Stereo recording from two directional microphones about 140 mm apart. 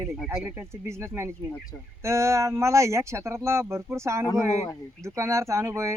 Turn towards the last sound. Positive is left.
turn(degrees=-20)  # may be behind; listen again after turning